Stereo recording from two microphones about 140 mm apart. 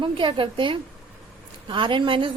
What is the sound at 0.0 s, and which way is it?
A woman's voice, 40° right (ahead or behind).